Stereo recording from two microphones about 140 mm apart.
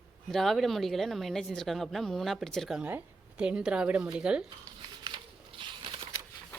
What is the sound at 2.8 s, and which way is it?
Speech, 10° right (ahead or behind).